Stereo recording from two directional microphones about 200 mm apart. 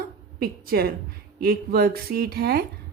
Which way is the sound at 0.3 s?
45° right (ahead or behind).